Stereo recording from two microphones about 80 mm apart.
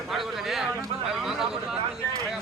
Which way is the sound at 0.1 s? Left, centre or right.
Centre.